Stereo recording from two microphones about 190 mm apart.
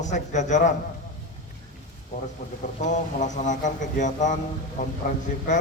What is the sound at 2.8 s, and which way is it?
Speech, 40° left (ahead or behind).